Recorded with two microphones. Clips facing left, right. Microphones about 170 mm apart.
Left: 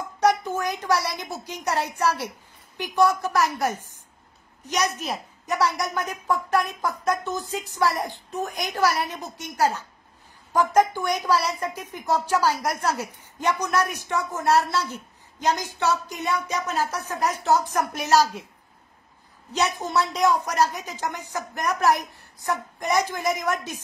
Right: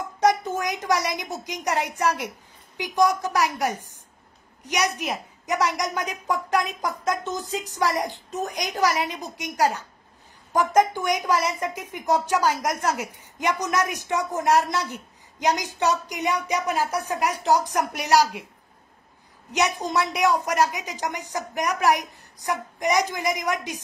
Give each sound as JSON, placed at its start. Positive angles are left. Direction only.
{"t": 0.2, "sound": "a woman's voice", "side_deg": -20}
{"t": 19.5, "sound": "a woman's voice", "side_deg": -15}